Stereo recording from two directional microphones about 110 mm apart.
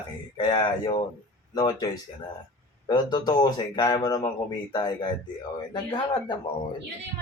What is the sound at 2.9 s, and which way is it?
A man's voice, 40° left (ahead or behind).